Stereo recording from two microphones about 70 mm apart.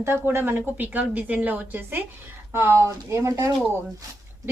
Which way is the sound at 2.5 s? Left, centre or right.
Right.